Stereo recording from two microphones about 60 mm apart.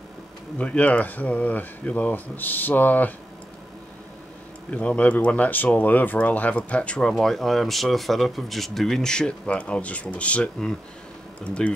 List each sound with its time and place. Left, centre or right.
0.6 s speech: left
4.6 s speech: left